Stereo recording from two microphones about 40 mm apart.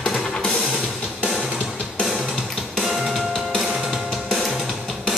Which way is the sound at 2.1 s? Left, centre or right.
Centre.